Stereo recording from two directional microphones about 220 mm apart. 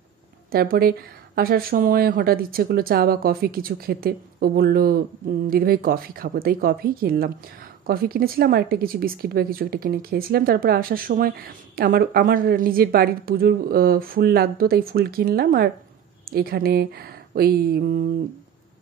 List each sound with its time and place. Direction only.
0.5 s speech: 45° right (ahead or behind)